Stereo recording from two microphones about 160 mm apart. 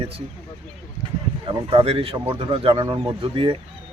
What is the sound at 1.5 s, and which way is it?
Speech, 35° right (ahead or behind).